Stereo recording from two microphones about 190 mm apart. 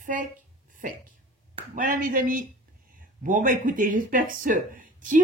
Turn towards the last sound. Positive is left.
turn(degrees=-45)  # may be behind; listen again after turning